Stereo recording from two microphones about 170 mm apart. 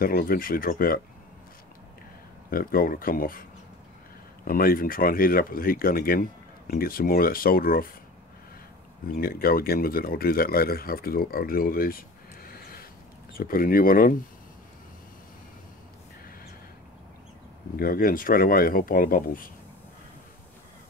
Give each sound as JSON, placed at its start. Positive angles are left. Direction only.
{"t": 0.0, "sound": "speech", "side_deg": 60}
{"t": 2.5, "sound": "speech", "side_deg": 60}
{"t": 4.5, "sound": "speech", "side_deg": 55}
{"t": 9.1, "sound": "speech", "side_deg": 60}
{"t": 12.4, "sound": "a sound", "side_deg": 60}
{"t": 13.3, "sound": "speech", "side_deg": 60}
{"t": 17.7, "sound": "speech", "side_deg": 60}